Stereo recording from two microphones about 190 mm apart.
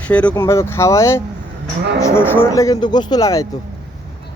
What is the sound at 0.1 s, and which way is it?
Speech, 5° left (ahead or behind).